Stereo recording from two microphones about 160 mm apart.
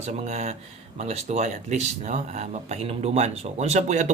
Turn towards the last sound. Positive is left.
turn(degrees=-45)  # may be behind; listen again after turning